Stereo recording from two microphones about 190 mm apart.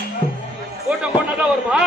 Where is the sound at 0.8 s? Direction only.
5° right (ahead or behind).